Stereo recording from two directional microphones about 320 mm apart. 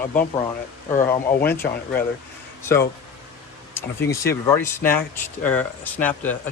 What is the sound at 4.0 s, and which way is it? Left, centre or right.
Speech, centre.